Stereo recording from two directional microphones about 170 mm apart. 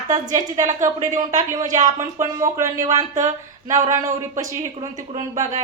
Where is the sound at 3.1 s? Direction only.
45° right (ahead or behind).